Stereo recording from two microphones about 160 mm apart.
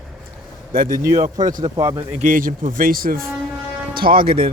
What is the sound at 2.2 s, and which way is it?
Speech, 55° right (ahead or behind).